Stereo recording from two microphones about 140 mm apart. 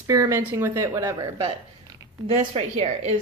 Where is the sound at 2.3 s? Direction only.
50° right (ahead or behind).